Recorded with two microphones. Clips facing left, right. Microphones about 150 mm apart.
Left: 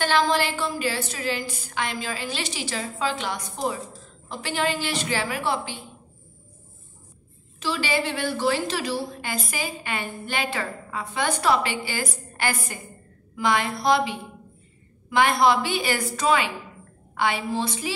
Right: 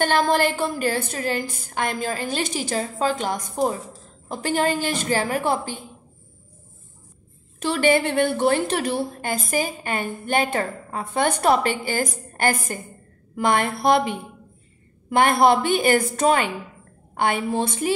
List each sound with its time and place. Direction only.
0.0 s a woman's voice: 50° right (ahead or behind)
7.6 s a woman's voice: 55° right (ahead or behind)